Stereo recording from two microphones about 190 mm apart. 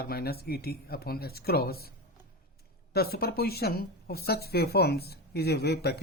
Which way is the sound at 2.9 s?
55° left (ahead or behind).